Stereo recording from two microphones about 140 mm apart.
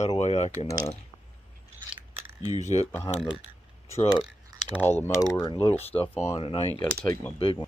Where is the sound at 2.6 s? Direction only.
50° left (ahead or behind).